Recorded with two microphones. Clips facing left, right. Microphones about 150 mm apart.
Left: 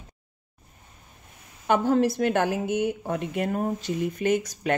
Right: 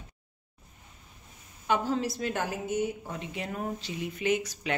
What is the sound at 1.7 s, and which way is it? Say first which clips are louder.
A woman's voice: left 7 dB; 55° left (ahead or behind).